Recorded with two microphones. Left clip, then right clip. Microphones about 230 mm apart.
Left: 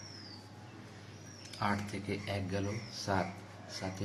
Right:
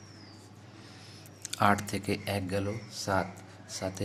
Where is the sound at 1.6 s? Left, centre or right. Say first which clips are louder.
Right 9 dB; right.